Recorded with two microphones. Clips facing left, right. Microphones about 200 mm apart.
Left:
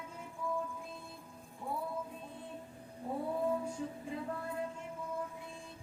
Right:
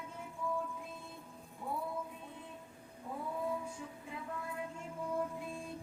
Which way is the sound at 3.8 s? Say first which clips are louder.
Left 6 dB; 35° left (ahead or behind).